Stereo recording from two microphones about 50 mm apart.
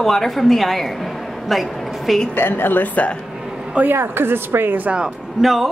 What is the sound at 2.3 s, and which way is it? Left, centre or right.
Speech, left.